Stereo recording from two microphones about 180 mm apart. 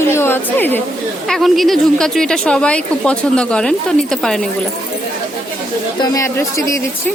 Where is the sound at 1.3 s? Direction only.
Centre (ahead or behind).